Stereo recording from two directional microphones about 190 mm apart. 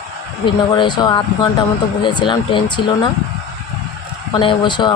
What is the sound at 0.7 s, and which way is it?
Speech, 25° left (ahead or behind).